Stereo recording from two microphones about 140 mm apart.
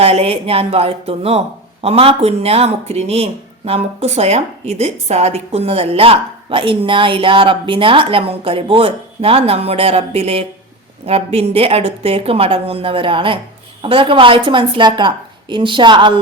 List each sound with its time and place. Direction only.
0.0 s a woman's voice: 45° right (ahead or behind)